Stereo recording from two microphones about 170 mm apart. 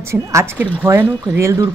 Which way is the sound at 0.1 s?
15° right (ahead or behind).